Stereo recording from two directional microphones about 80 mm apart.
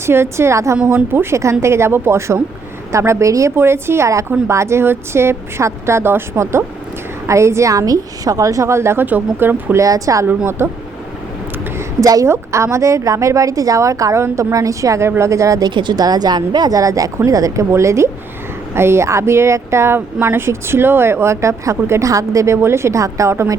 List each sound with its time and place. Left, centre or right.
0.0 s a woman's voice: right
3.5 s a woman's voice: right
9.0 s speech: right
9.7 s a woman's voice: right
10.2 s speech: right
11.8 s a woman's voice: right
15.7 s a woman's voice: right